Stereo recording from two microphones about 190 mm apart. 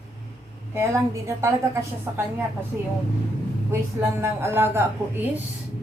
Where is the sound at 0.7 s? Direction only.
15° right (ahead or behind).